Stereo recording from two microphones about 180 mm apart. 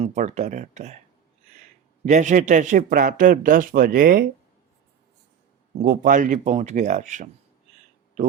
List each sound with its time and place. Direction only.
0.0 s speech: 40° right (ahead or behind)
2.0 s speech: 45° right (ahead or behind)
5.8 s speech: 50° right (ahead or behind)